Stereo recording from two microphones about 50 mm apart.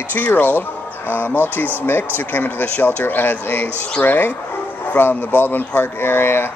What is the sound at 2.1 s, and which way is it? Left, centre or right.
Speech, left.